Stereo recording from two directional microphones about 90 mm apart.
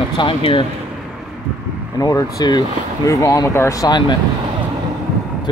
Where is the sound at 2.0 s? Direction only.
40° left (ahead or behind).